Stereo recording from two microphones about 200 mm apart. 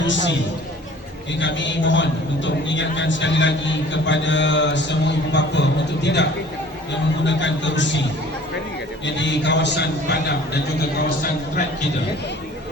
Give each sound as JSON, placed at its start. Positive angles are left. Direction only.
{"t": 0.0, "sound": "a man's voice", "side_deg": 65}
{"t": 1.4, "sound": "a man's voice", "side_deg": 65}
{"t": 7.3, "sound": "a man's voice", "side_deg": 65}
{"t": 9.0, "sound": "a man's voice", "side_deg": 65}